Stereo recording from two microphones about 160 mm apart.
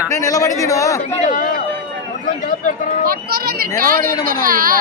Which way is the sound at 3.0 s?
70° right (ahead or behind).